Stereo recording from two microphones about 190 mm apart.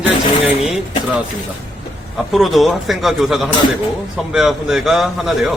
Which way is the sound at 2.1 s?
Centre (ahead or behind).